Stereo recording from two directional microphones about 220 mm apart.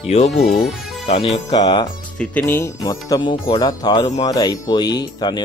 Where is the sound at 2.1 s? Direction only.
10° left (ahead or behind).